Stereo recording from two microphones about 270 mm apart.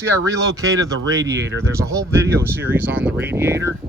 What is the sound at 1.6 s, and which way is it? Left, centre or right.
Speech, centre.